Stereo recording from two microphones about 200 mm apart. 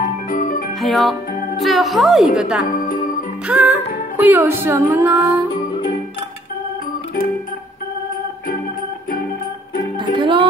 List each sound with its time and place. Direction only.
0.0 s music: 45° left (ahead or behind)
0.7 s a woman's voice: centre (ahead or behind)
2.8 s music: 45° left (ahead or behind)
3.4 s music: 10° right (ahead or behind)
9.9 s music: 25° right (ahead or behind)